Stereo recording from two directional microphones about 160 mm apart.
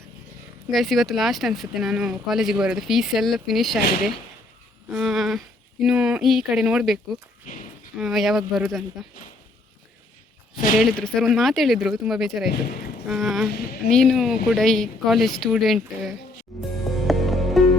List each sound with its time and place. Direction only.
0.7 s speech: centre (ahead or behind)
7.4 s a sound: 55° left (ahead or behind)
7.9 s speech: centre (ahead or behind)
11.0 s speech: centre (ahead or behind)
13.5 s speech: 75° left (ahead or behind)
13.9 s speech: centre (ahead or behind)
16.5 s music: centre (ahead or behind)